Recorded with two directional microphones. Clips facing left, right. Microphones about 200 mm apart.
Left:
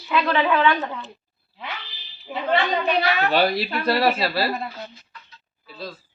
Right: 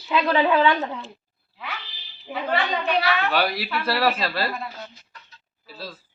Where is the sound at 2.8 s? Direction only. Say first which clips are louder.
Left 2 dB; 40° left (ahead or behind).